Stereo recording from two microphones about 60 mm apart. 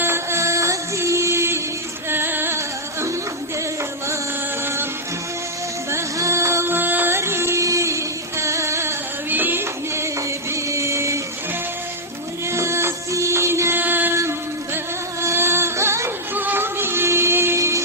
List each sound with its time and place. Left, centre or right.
0.0 s music: right
2.0 s female singing: right
4.6 s music: right
5.9 s music: right
6.7 s music: right
9.3 s music: right
9.9 s music: right
12.5 s music: right
13.8 s a sound: right
14.2 s a sound: right
16.3 s music: right